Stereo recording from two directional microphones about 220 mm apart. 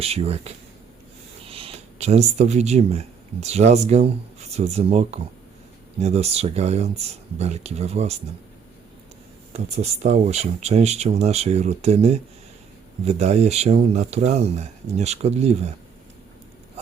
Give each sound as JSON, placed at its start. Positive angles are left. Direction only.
{"t": 0.0, "sound": "speech", "side_deg": -25}
{"t": 9.5, "sound": "speech", "side_deg": -30}